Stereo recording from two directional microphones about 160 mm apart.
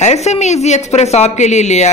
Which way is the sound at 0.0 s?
45° left (ahead or behind).